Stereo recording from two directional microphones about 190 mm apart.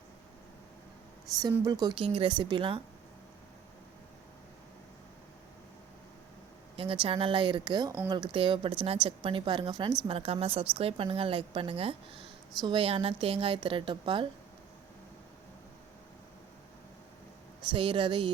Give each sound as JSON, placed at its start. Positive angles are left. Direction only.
{"t": 1.4, "sound": "a woman's voice", "side_deg": -20}
{"t": 6.7, "sound": "a woman's voice", "side_deg": -30}
{"t": 17.7, "sound": "a woman's voice", "side_deg": -25}